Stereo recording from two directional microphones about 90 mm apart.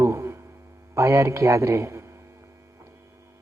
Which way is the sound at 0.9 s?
35° right (ahead or behind).